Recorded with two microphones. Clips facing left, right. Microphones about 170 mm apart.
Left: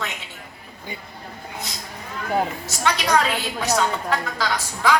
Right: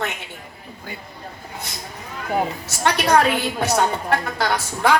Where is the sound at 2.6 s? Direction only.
60° right (ahead or behind).